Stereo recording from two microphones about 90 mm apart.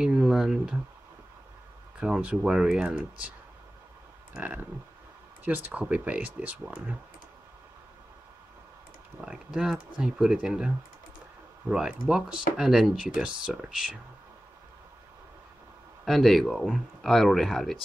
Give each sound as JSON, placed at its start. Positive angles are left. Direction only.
{"t": 0.0, "sound": "speech", "side_deg": -5}
{"t": 2.0, "sound": "speech", "side_deg": -10}
{"t": 4.3, "sound": "a sound", "side_deg": -15}
{"t": 5.4, "sound": "speech", "side_deg": -20}
{"t": 9.2, "sound": "speech", "side_deg": -10}
{"t": 11.7, "sound": "speech", "side_deg": -5}
{"t": 16.1, "sound": "speech", "side_deg": 0}